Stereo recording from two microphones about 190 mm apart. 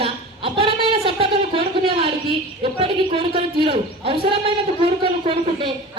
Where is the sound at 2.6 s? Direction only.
30° right (ahead or behind).